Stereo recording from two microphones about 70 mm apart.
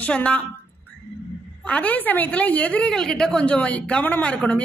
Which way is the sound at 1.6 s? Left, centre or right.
Left.